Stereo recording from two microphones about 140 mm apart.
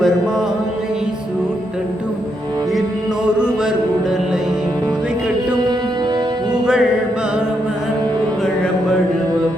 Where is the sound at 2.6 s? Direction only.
Centre (ahead or behind).